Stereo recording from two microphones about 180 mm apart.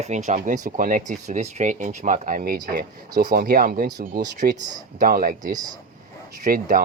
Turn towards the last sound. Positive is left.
turn(degrees=-50)  # may be behind; listen again after turning